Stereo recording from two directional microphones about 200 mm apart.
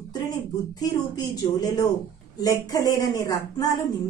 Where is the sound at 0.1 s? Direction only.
20° left (ahead or behind).